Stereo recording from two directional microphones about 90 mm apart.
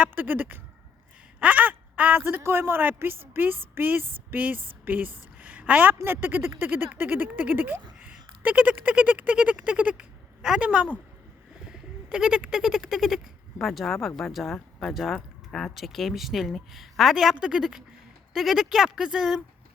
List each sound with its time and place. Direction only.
0.0 s speech: 20° right (ahead or behind)
5.4 s a sound: 15° right (ahead or behind)
6.1 s speech: 25° right (ahead or behind); by 19.4 s 5° right (ahead or behind)